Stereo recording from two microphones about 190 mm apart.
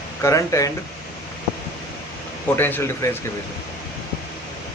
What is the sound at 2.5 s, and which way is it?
Speech, 10° left (ahead or behind).